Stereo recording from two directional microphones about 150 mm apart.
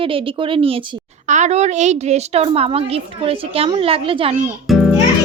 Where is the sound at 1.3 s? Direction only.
50° right (ahead or behind).